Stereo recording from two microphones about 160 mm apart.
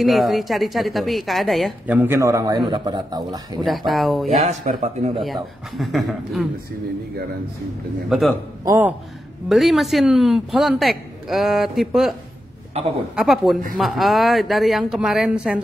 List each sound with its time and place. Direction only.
0.0 s a man's voice: centre (ahead or behind)
1.9 s a man's voice: 10° right (ahead or behind)
3.6 s a man's voice: centre (ahead or behind)
4.3 s speech: 50° right (ahead or behind)
5.2 s a man's voice: centre (ahead or behind)
8.1 s a man's voice: centre (ahead or behind)
8.6 s a man's voice: 15° right (ahead or behind)
9.5 s a man's voice: centre (ahead or behind)
12.7 s speech: 40° right (ahead or behind)
13.1 s a man's voice: centre (ahead or behind)